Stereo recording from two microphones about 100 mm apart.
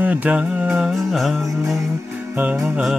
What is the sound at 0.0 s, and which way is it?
Music, 15° right (ahead or behind).